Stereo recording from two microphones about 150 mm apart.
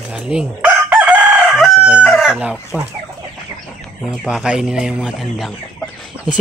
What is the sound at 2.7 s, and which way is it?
Speech, 10° right (ahead or behind).